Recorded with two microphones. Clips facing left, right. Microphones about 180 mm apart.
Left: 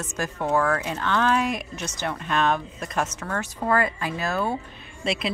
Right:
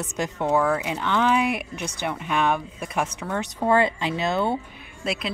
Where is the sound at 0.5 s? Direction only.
5° right (ahead or behind).